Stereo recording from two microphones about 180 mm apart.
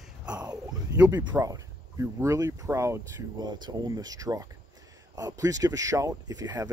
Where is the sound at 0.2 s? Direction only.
5° right (ahead or behind).